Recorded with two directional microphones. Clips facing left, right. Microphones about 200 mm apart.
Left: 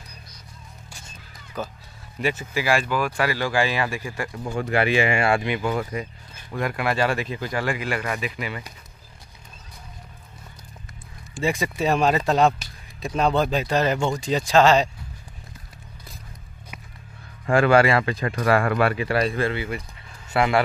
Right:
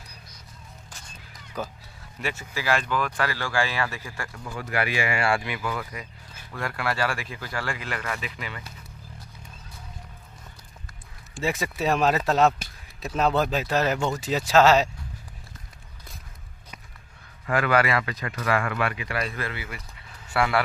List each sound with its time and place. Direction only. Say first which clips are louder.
1.6 s speech: left 2 dB; 10° right (ahead or behind)
2.2 s speech: left 5 dB; 15° left (ahead or behind)
4.4 s speech: left 6 dB; 25° left (ahead or behind)
11.3 s speech: left 3 dB; centre (ahead or behind)
17.5 s speech: left 6 dB; 30° left (ahead or behind)